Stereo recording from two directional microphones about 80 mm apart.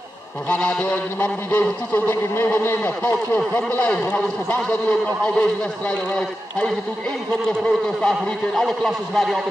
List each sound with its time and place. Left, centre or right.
0.5 s a man's voice: left
3.0 s speech: centre
8.1 s a man's voice: centre